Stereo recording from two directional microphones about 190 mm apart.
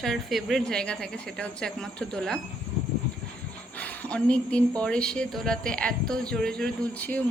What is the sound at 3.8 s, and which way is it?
A woman's voice, 10° left (ahead or behind).